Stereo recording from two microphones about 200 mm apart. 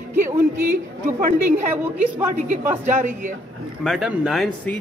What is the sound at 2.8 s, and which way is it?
Speech, 40° right (ahead or behind).